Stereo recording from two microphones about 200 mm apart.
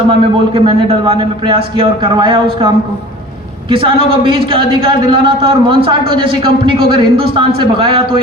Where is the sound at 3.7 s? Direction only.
25° right (ahead or behind).